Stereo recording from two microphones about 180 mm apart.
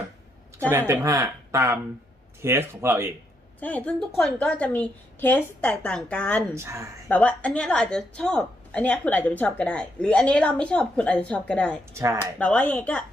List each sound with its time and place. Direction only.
0.7 s speech: 15° right (ahead or behind)
3.6 s a woman's voice: 10° left (ahead or behind)
6.5 s speech: 15° right (ahead or behind)
7.1 s a woman's voice: 10° left (ahead or behind)
11.9 s speech: 15° right (ahead or behind)
12.4 s a woman's voice: 10° left (ahead or behind)